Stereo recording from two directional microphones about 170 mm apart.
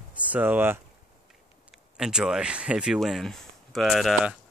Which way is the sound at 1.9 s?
5° right (ahead or behind).